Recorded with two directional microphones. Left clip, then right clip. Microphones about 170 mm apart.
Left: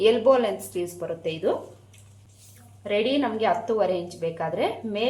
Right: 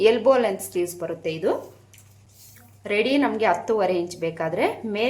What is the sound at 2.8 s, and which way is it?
A woman's voice, 25° right (ahead or behind).